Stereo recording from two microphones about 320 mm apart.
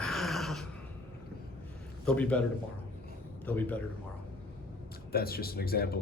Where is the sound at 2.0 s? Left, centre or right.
Centre.